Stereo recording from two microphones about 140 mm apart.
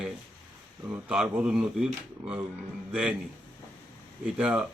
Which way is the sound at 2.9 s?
5° right (ahead or behind).